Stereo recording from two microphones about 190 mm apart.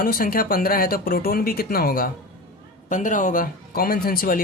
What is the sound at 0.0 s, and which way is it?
Speech, 50° left (ahead or behind).